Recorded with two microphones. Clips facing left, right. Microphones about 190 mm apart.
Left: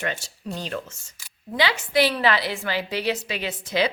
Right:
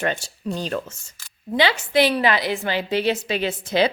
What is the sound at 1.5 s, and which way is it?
A woman's voice, 25° right (ahead or behind).